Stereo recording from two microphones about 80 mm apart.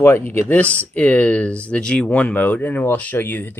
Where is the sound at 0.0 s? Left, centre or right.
Left.